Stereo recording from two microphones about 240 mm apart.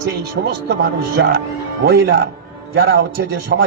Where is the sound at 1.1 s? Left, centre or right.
Right.